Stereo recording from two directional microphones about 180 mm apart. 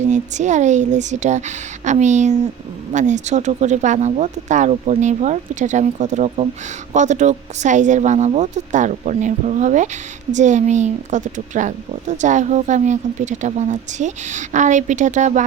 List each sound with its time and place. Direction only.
0.1 s speech: 40° right (ahead or behind)